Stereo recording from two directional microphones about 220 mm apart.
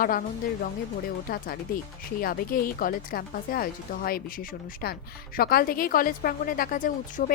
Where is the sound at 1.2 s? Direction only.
40° left (ahead or behind).